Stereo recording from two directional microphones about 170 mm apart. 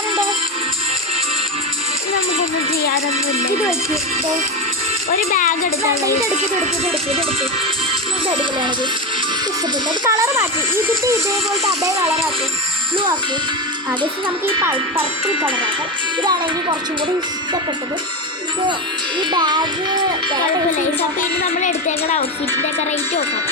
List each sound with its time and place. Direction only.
5.3 s a woman's voice: 50° left (ahead or behind)
10.0 s speech: 15° right (ahead or behind)
14.4 s speech: 10° right (ahead or behind)
16.2 s speech: 25° right (ahead or behind)
19.3 s speech: 25° right (ahead or behind)
21.2 s a woman's voice: 45° left (ahead or behind)